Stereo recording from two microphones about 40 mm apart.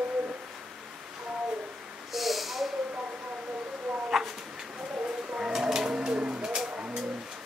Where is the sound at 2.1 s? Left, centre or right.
Centre.